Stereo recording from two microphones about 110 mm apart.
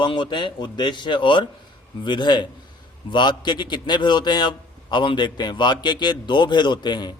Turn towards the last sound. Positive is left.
turn(degrees=40)  # may be behind; listen again after turning